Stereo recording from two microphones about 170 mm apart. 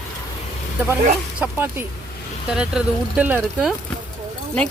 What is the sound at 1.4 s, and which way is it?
Speech, 10° right (ahead or behind).